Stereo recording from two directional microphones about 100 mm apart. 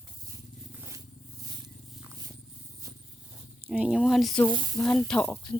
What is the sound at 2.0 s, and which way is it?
Purr, 30° right (ahead or behind).